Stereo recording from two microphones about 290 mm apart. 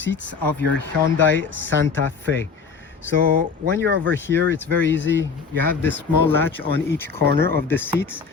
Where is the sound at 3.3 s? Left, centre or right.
Right.